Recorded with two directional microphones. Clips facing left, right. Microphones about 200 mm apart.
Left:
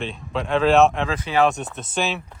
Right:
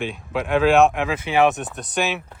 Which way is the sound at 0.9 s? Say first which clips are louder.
Right 1 dB; 15° right (ahead or behind).